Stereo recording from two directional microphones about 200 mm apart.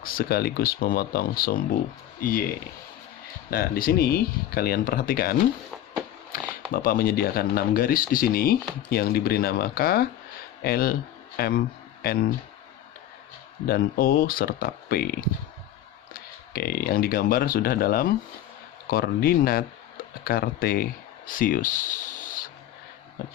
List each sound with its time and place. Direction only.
0.0 s speech: 45° left (ahead or behind)
3.4 s speech: 45° left (ahead or behind)
6.7 s a man's voice: 45° left (ahead or behind)
13.7 s speech: 50° left (ahead or behind)